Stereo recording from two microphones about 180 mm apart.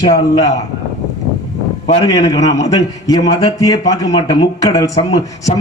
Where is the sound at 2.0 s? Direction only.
20° left (ahead or behind).